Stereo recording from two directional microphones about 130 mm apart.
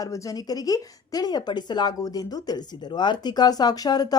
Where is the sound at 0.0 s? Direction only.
25° left (ahead or behind).